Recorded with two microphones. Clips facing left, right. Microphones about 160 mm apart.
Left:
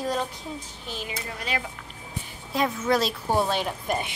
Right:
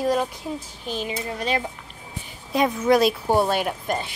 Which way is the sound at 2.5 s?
15° right (ahead or behind).